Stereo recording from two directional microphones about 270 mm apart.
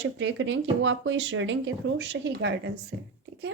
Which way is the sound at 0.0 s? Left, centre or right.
Right.